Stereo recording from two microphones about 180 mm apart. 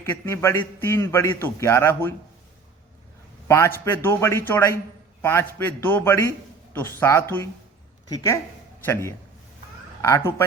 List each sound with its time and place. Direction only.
0.0 s a man's voice: 15° left (ahead or behind)
3.4 s a man's voice: 15° left (ahead or behind)